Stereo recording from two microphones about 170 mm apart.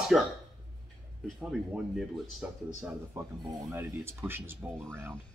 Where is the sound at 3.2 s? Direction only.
15° right (ahead or behind).